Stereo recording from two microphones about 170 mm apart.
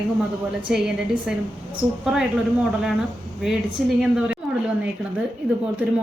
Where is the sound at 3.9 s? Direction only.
5° right (ahead or behind).